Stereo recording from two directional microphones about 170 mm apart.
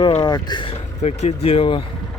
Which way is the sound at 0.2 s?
25° left (ahead or behind).